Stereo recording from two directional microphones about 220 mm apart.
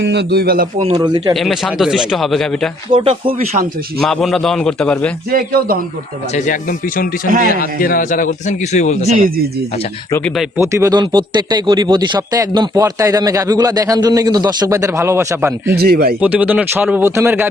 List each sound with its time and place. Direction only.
0.0 s a man's voice: 50° right (ahead or behind)
0.8 s speech: 25° right (ahead or behind)
1.3 s speech: centre (ahead or behind)
2.9 s speech: 25° right (ahead or behind)
4.0 s speech: centre (ahead or behind)
5.3 s a man's voice: 45° right (ahead or behind)
6.3 s speech: 35° left (ahead or behind)
9.0 s speech: 40° right (ahead or behind)
10.1 s speech: 10° left (ahead or behind)
10.6 s a man's voice: 15° right (ahead or behind)
15.7 s a man's voice: 45° right (ahead or behind)
16.2 s a man's voice: 5° right (ahead or behind)